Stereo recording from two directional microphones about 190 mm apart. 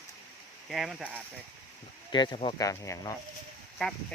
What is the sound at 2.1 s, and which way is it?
Speech, 25° left (ahead or behind).